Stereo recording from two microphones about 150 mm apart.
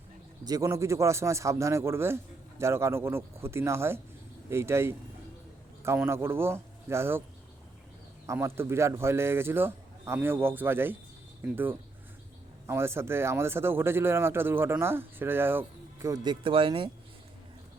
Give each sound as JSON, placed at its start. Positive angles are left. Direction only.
{"t": 0.4, "sound": "a man's voice", "side_deg": -25}
{"t": 6.1, "sound": "speech", "side_deg": -15}
{"t": 8.3, "sound": "speech", "side_deg": -15}